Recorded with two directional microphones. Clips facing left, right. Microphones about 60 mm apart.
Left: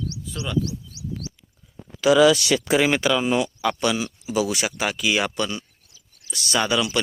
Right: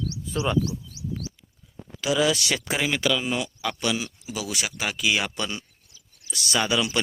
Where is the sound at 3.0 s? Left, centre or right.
Centre.